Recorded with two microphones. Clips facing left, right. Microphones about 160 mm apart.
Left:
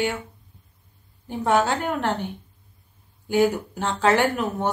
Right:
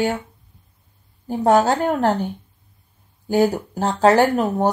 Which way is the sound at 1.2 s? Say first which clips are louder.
Right 5 dB; 40° right (ahead or behind).